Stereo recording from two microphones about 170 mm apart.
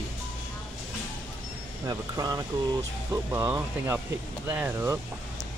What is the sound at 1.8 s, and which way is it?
Speech, 20° right (ahead or behind).